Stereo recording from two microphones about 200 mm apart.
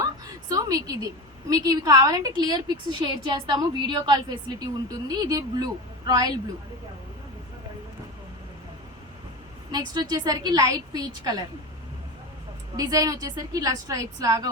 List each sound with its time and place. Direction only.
0.0 s a sound: 15° right (ahead or behind)
1.5 s a woman's voice: 15° right (ahead or behind)
9.7 s a woman's voice: 20° right (ahead or behind)
12.7 s a woman's voice: 20° right (ahead or behind)